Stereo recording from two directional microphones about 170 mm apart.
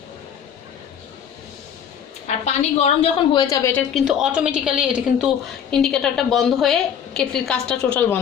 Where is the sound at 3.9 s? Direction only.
5° right (ahead or behind).